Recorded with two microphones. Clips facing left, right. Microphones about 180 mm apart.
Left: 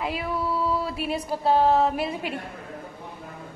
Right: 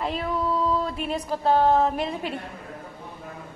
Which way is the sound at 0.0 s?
5° left (ahead or behind).